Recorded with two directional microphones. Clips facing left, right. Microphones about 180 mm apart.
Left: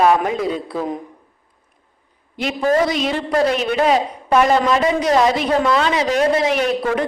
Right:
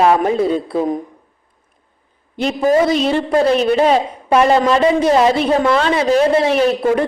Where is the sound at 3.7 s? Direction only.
35° right (ahead or behind).